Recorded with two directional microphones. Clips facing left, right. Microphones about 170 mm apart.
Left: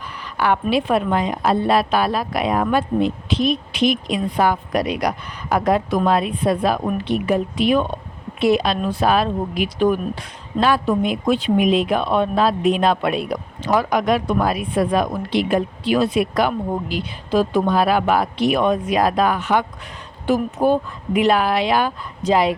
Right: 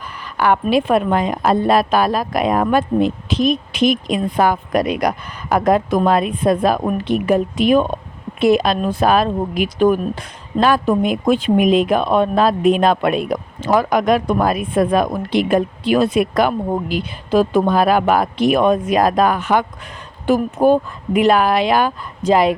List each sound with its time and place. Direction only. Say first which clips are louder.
0.3 s speech: right 3 dB; 50° right (ahead or behind)